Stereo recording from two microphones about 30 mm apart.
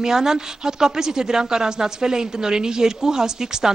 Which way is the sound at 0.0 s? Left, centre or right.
Right.